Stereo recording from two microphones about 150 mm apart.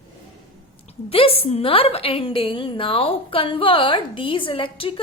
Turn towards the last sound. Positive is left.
turn(degrees=35)  # may be behind; listen again after turning